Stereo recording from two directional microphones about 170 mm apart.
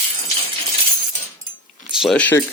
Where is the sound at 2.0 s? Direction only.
5° left (ahead or behind).